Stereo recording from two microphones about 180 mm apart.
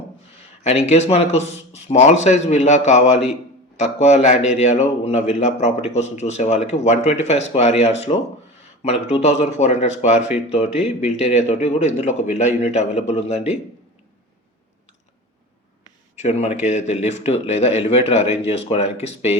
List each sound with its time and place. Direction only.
0.6 s a man's voice: 35° left (ahead or behind)
16.1 s a man's voice: 35° left (ahead or behind)